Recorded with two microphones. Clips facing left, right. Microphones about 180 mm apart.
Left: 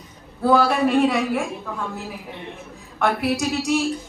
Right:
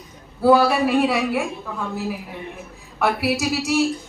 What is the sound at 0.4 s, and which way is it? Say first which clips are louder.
Speech: right 2 dB; 5° right (ahead or behind).